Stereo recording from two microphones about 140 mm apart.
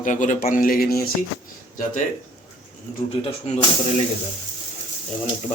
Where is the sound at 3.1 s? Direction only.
45° left (ahead or behind).